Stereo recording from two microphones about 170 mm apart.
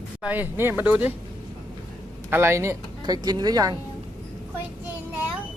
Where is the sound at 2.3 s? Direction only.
15° right (ahead or behind).